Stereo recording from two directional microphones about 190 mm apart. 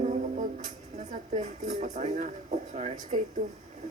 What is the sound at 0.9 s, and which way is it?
A woman's voice, 35° right (ahead or behind).